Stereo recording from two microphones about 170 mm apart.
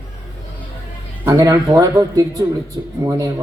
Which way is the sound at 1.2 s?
20° right (ahead or behind).